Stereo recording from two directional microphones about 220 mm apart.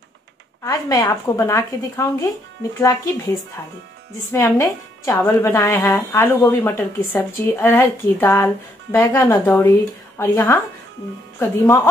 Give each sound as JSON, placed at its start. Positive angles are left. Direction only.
{"t": 0.7, "sound": "a woman's voice", "side_deg": 15}
{"t": 4.3, "sound": "a woman's voice", "side_deg": 10}